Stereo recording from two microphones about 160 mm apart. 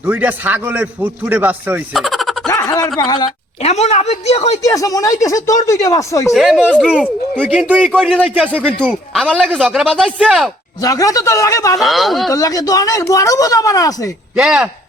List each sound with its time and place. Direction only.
0.0 s a man's voice: 10° right (ahead or behind)
1.9 s a sound: centre (ahead or behind)
2.5 s a sound: 20° left (ahead or behind)
3.6 s a woman's voice: 45° left (ahead or behind)
4.6 s speech: 20° left (ahead or behind)
6.3 s speech: centre (ahead or behind)
7.3 s a man's voice: 10° right (ahead or behind)
10.8 s speech: 20° left (ahead or behind)
11.8 s speech: centre (ahead or behind)
12.3 s speech: 20° left (ahead or behind)
14.3 s speech: 5° right (ahead or behind)